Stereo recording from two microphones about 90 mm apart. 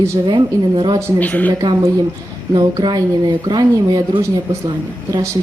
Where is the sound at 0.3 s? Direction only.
60° right (ahead or behind).